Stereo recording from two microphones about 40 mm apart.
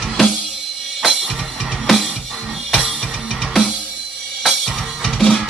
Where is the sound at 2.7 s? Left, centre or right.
Centre.